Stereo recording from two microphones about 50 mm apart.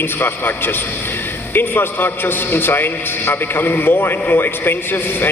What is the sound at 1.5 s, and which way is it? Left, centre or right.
A man's voice, left.